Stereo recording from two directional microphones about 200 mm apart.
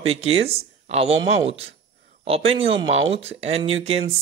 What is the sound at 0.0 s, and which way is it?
Speech, 30° right (ahead or behind).